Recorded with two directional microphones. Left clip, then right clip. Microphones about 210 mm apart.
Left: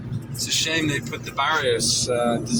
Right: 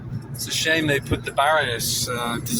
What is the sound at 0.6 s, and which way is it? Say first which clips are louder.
A man's voice: right 5 dB; 20° right (ahead or behind).